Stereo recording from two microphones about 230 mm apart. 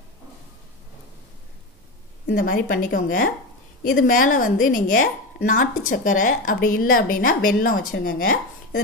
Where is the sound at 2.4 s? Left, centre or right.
Left.